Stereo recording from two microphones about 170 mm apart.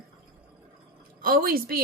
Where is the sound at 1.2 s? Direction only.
60° right (ahead or behind).